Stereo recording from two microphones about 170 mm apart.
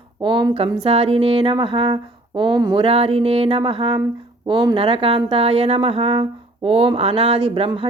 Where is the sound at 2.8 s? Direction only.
35° right (ahead or behind).